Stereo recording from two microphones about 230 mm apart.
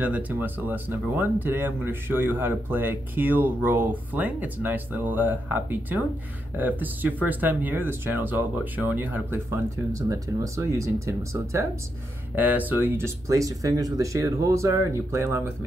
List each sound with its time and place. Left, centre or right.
0.0 s speech: centre